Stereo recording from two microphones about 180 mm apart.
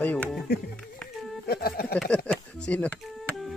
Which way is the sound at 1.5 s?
60° left (ahead or behind).